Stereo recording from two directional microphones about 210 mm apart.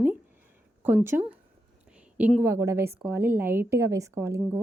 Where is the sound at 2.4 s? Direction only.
15° right (ahead or behind).